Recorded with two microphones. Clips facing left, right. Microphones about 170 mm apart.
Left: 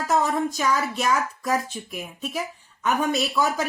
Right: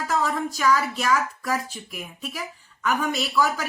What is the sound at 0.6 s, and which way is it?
Speech, 20° left (ahead or behind).